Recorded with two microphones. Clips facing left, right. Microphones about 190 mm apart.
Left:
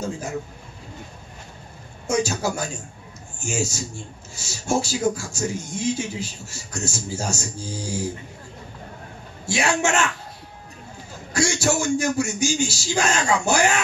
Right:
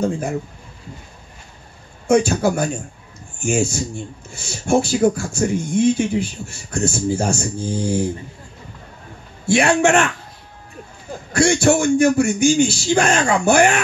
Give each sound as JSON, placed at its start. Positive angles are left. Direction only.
{"t": 2.0, "sound": "speech", "side_deg": -55}
{"t": 9.5, "sound": "speech", "side_deg": -55}
{"t": 11.3, "sound": "speech", "side_deg": -55}